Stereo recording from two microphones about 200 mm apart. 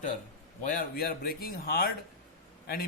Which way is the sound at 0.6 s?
45° left (ahead or behind).